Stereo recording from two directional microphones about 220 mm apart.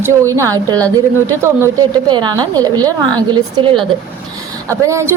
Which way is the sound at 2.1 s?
20° right (ahead or behind).